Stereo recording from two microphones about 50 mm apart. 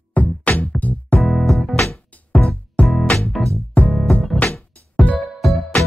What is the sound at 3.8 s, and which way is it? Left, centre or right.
Music, left.